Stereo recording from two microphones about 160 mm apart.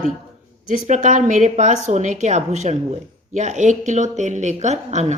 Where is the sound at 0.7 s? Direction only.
50° right (ahead or behind).